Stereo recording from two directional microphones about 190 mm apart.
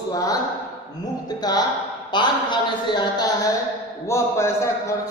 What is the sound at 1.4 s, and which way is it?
A man's voice, 20° left (ahead or behind).